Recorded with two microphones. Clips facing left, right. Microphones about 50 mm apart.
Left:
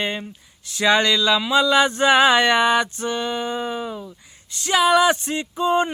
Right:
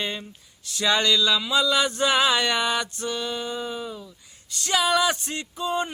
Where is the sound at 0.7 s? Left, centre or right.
Left.